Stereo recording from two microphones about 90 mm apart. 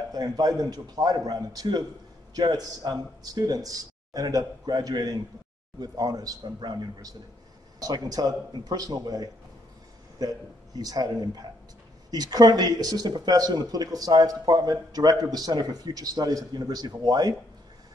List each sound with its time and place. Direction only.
0.1 s speech: 45° right (ahead or behind)